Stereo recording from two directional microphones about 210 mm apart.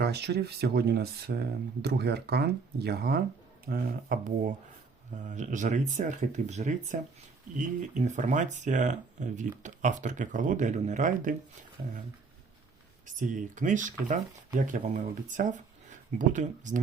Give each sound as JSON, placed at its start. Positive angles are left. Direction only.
{"t": 0.0, "sound": "speech", "side_deg": -50}
{"t": 13.1, "sound": "speech", "side_deg": -35}